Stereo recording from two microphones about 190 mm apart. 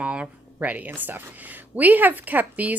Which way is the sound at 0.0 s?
5° right (ahead or behind).